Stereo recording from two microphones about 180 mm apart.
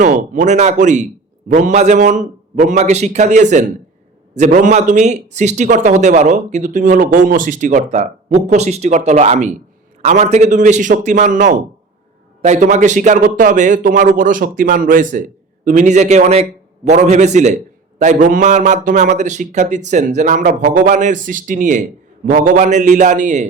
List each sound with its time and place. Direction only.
0.0 s a man's voice: 45° right (ahead or behind)